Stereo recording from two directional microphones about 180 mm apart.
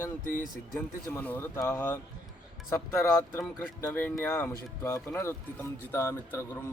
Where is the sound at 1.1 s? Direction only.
10° left (ahead or behind).